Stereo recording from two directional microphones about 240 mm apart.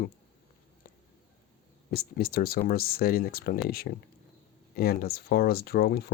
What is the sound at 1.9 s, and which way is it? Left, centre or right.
Speech, left.